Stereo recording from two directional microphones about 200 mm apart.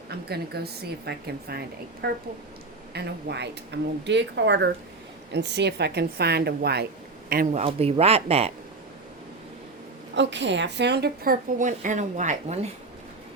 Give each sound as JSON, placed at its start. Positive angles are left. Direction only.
{"t": 0.1, "sound": "a woman's voice", "side_deg": -50}
{"t": 7.6, "sound": "speech", "side_deg": -30}
{"t": 10.2, "sound": "a woman's voice", "side_deg": -60}